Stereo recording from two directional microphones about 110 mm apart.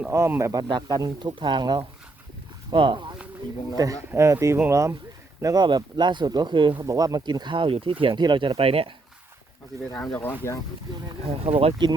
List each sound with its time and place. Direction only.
0.1 s speech: 25° right (ahead or behind)
0.7 s speech: 40° right (ahead or behind)
3.8 s speech: 30° right (ahead or behind)
5.6 s speech: 45° right (ahead or behind)
6.7 s speech: 35° right (ahead or behind); by 7.9 s 55° right (ahead or behind)
8.0 s speech: 40° right (ahead or behind)
8.5 s speech: 60° right (ahead or behind)
10.0 s speech: 15° left (ahead or behind)
11.4 s speech: 60° right (ahead or behind)